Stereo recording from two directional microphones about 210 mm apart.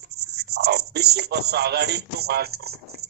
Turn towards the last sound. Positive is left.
turn(degrees=-50)  # may be behind; listen again after turning